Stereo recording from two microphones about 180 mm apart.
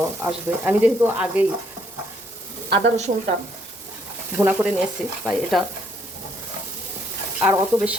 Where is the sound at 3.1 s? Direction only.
35° right (ahead or behind).